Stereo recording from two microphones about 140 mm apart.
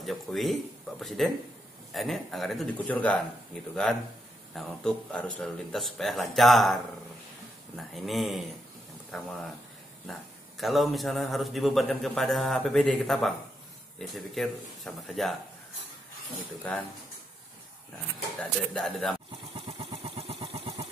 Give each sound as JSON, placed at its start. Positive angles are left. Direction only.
{"t": 0.0, "sound": "a man's voice", "side_deg": 0}
{"t": 4.6, "sound": "a man's voice", "side_deg": 5}
{"t": 10.6, "sound": "a man's voice", "side_deg": 0}
{"t": 16.6, "sound": "speech", "side_deg": 10}
{"t": 18.4, "sound": "a man's voice", "side_deg": 5}
{"t": 19.5, "sound": "vehicle", "side_deg": -45}